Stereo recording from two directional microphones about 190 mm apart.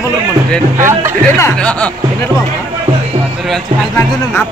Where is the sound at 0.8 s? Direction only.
15° right (ahead or behind).